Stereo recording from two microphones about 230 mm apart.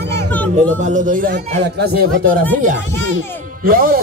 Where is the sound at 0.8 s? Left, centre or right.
Right.